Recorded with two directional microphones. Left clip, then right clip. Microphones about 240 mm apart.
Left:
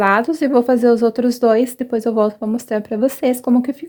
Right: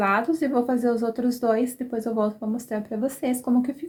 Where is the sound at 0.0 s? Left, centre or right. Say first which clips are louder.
Left 7 dB; left.